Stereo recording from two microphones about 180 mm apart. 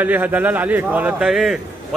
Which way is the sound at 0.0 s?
10° right (ahead or behind).